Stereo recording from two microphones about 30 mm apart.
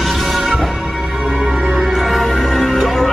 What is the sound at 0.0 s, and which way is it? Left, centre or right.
Music, centre.